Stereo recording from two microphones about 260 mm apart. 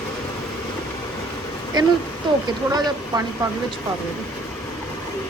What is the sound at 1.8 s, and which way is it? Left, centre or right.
Speech, centre.